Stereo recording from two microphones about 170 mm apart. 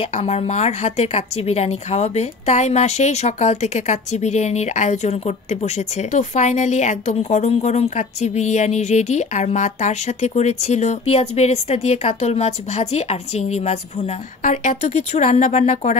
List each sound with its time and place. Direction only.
0.0 s speech: 35° left (ahead or behind)